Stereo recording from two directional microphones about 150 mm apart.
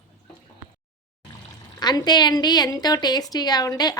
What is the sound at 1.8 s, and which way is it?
A woman's voice, 25° left (ahead or behind).